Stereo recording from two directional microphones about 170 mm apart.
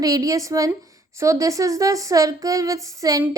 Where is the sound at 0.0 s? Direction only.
20° right (ahead or behind).